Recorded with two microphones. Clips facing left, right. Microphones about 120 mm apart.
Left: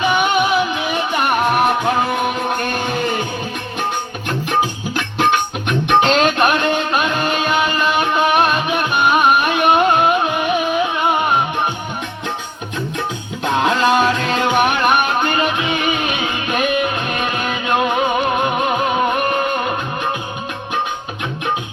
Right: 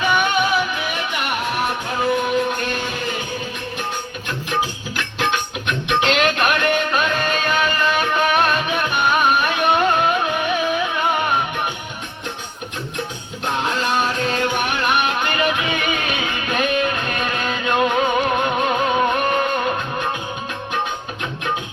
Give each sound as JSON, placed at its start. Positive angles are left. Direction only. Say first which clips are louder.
{"t": 0.0, "sound": "music", "louder": "left 3 dB", "side_deg": 15}
{"t": 1.1, "sound": "music", "louder": "left 9 dB", "side_deg": 45}
{"t": 4.9, "sound": "music", "louder": "left 6 dB", "side_deg": 50}
{"t": 13.7, "sound": "music", "louder": "left 7 dB", "side_deg": 90}
{"t": 15.3, "sound": "music", "louder": "left 2 dB", "side_deg": 30}